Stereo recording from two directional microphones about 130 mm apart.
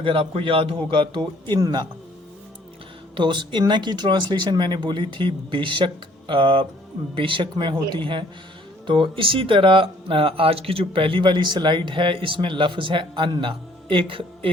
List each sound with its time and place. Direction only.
0.0 s speech: 45° right (ahead or behind)
3.2 s speech: 35° right (ahead or behind)